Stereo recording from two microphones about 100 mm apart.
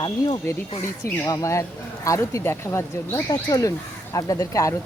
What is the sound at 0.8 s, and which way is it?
Speech, 35° left (ahead or behind).